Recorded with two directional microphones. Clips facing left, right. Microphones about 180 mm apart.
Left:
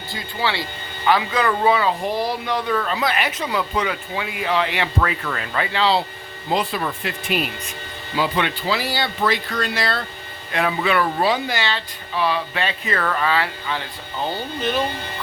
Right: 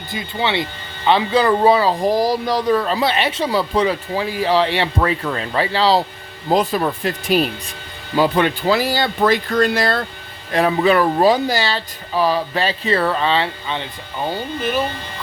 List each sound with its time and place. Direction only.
0.1 s speech: 20° right (ahead or behind)
14.3 s speech: 10° right (ahead or behind)